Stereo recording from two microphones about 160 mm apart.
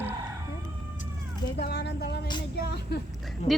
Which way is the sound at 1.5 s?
90° left.